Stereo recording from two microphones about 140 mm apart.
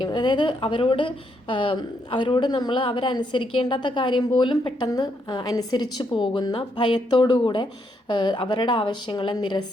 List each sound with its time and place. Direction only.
0.0 s a woman's voice: 35° left (ahead or behind)